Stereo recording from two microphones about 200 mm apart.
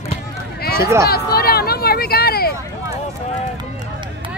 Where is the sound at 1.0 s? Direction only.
50° left (ahead or behind).